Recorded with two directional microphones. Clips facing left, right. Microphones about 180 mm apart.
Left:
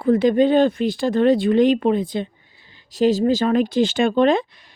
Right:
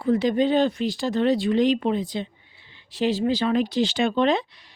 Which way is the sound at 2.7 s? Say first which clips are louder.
Left 6 dB; 40° left (ahead or behind).